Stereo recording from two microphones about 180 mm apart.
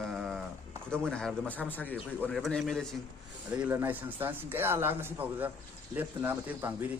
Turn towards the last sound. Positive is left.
turn(degrees=-10)  # may be behind; listen again after turning